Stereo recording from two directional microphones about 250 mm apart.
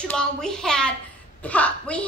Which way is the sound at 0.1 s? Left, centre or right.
Centre.